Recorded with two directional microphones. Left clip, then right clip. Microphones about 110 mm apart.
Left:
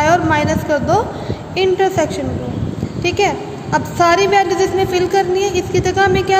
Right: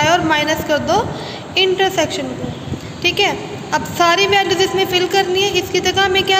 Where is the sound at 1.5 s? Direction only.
25° left (ahead or behind).